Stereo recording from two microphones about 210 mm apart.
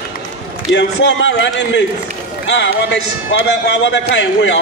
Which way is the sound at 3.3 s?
55° left (ahead or behind).